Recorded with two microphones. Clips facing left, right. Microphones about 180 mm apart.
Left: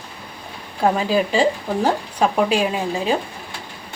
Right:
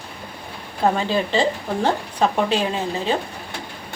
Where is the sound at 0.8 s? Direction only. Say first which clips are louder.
Left 2 dB; 10° left (ahead or behind).